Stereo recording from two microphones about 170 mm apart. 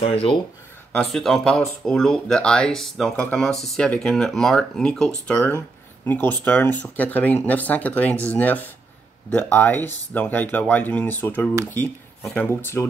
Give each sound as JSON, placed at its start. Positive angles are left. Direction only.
{"t": 0.0, "sound": "speech", "side_deg": 35}
{"t": 0.9, "sound": "speech", "side_deg": 0}